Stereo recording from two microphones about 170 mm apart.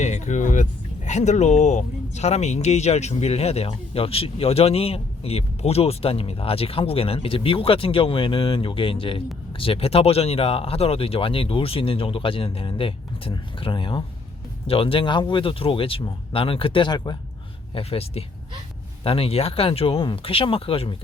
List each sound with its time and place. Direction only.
0.0 s speech: 45° left (ahead or behind)